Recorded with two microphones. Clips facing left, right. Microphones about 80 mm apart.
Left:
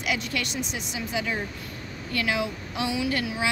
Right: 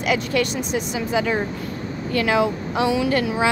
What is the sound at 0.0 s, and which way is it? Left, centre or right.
Speech, right.